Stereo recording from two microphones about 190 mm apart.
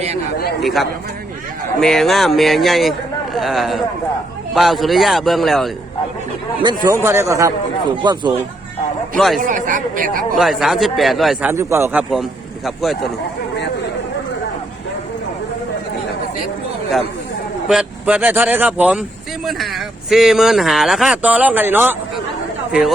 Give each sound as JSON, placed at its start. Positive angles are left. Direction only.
{"t": 0.6, "sound": "speech", "side_deg": 0}
{"t": 6.6, "sound": "speech", "side_deg": -20}
{"t": 9.1, "sound": "speech", "side_deg": 0}
{"t": 9.4, "sound": "speech", "side_deg": -45}
{"t": 10.3, "sound": "speech", "side_deg": 0}
{"t": 11.5, "sound": "speech", "side_deg": -15}
{"t": 17.7, "sound": "speech", "side_deg": -5}